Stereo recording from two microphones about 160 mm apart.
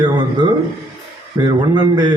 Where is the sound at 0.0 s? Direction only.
25° right (ahead or behind).